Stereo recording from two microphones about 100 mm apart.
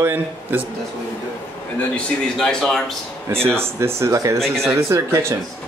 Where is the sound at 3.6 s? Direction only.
25° right (ahead or behind).